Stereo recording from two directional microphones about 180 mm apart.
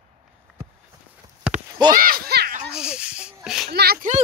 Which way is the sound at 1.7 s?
20° right (ahead or behind).